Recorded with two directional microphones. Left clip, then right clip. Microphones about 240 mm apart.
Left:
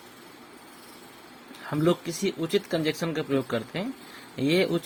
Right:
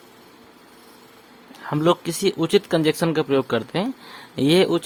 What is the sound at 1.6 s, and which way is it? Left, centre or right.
Speech, right.